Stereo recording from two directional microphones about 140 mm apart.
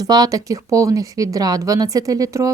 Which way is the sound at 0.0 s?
25° right (ahead or behind).